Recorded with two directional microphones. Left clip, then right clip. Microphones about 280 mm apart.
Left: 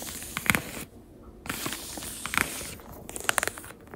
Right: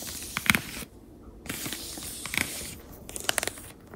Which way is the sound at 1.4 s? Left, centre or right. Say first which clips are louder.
Left 2 dB; left.